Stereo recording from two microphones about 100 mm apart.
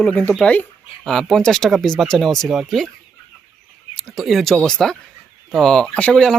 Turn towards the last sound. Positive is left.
turn(degrees=5)  # may be behind; listen again after turning